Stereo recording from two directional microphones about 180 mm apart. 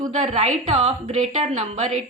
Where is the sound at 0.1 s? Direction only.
40° right (ahead or behind).